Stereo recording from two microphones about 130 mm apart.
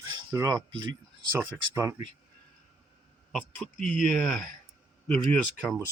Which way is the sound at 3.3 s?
10° left (ahead or behind).